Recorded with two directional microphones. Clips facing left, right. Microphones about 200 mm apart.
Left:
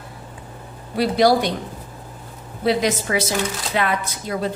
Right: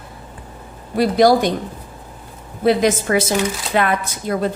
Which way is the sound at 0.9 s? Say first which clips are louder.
Right 3 dB; 45° right (ahead or behind).